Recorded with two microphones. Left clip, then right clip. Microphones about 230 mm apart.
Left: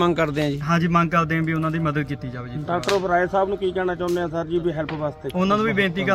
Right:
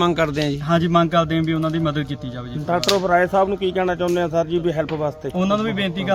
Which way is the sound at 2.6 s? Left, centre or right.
Right.